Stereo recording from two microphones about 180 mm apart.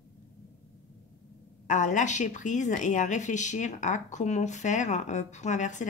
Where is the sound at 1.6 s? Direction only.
45° left (ahead or behind).